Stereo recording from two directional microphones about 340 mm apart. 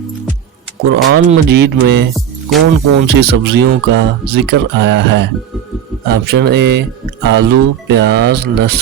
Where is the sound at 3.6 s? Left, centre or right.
Right.